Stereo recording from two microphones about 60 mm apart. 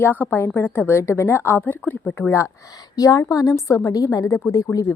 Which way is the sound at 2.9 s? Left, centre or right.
Left.